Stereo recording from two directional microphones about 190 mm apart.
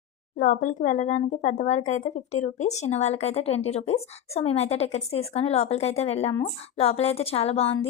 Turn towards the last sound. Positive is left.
turn(degrees=30)  # may be behind; listen again after turning